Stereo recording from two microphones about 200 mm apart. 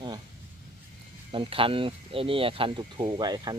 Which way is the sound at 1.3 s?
25° right (ahead or behind).